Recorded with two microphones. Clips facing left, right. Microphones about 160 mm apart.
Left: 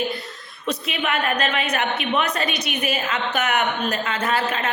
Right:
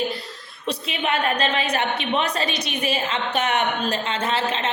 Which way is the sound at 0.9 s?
30° right (ahead or behind).